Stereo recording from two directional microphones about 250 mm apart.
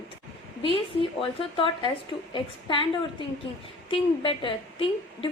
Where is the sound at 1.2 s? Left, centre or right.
Centre.